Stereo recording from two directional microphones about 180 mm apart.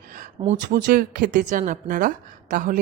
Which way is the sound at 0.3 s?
40° right (ahead or behind).